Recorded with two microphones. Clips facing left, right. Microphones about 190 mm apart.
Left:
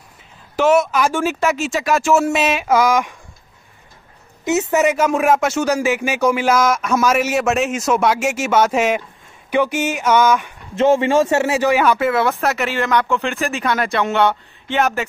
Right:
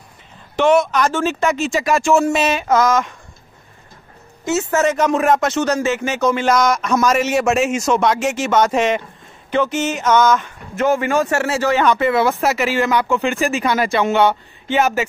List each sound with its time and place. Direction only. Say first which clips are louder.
0.6 s speech: even; 5° left (ahead or behind)
4.5 s speech: left 1 dB; 20° left (ahead or behind)
10.8 s speech: left 3 dB; 25° left (ahead or behind); by 15.0 s 5° right (ahead or behind)